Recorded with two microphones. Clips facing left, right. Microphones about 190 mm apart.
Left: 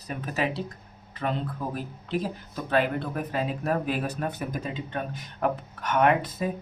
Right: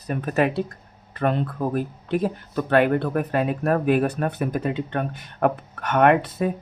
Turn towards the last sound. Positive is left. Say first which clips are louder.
# right 5 dB
turn(degrees=-65)  # may be behind; listen again after turning